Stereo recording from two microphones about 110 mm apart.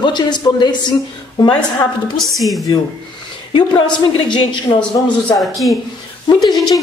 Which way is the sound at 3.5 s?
45° left (ahead or behind).